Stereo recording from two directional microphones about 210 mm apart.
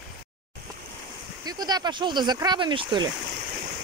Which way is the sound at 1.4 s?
20° right (ahead or behind).